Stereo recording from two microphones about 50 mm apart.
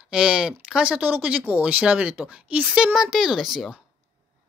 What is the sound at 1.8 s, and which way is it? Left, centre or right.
Speech, centre.